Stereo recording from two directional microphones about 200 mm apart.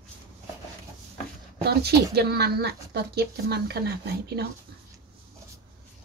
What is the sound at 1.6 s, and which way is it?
Speech, 55° right (ahead or behind).